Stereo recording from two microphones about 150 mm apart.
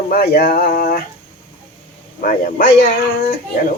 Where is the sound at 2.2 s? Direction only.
70° left (ahead or behind).